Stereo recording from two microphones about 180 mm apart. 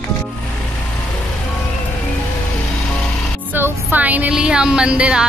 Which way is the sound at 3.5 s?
10° right (ahead or behind).